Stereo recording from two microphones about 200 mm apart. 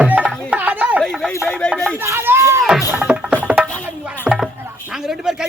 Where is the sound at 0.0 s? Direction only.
5° right (ahead or behind).